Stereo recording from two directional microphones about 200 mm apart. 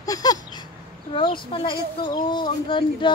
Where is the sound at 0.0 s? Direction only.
20° left (ahead or behind).